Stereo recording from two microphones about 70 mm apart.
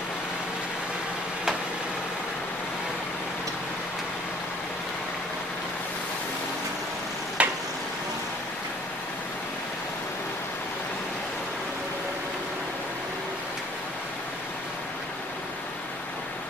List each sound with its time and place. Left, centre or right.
7.4 s tick-tock: centre